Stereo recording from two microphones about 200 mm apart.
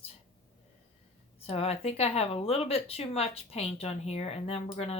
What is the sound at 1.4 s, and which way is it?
A woman's voice, 30° left (ahead or behind).